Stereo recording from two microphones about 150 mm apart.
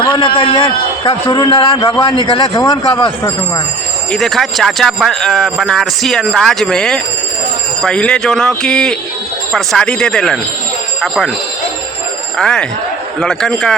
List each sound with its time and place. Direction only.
0.0 s a man's voice: 35° left (ahead or behind)
4.1 s speech: centre (ahead or behind)
12.4 s speech: 5° left (ahead or behind)